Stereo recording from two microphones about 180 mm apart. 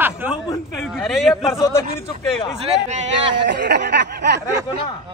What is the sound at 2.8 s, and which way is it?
Speech, 40° right (ahead or behind).